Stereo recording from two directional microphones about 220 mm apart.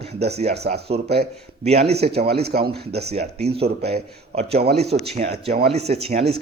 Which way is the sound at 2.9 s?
30° right (ahead or behind).